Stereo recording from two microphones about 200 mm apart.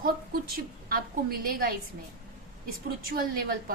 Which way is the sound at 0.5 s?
50° right (ahead or behind).